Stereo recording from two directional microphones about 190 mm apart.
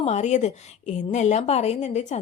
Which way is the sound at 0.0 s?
35° left (ahead or behind).